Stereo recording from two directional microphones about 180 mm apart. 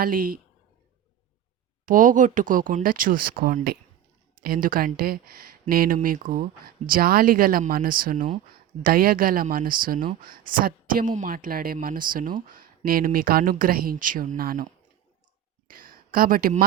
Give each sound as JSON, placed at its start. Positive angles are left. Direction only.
{"t": 0.0, "sound": "speech", "side_deg": -55}
{"t": 1.8, "sound": "speech", "side_deg": -50}
{"t": 15.6, "sound": "a sound", "side_deg": -50}